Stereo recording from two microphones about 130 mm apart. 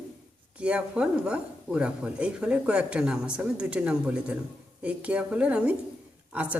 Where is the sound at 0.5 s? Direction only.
10° right (ahead or behind).